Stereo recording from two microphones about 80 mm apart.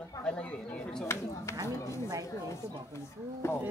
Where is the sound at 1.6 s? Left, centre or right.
Left.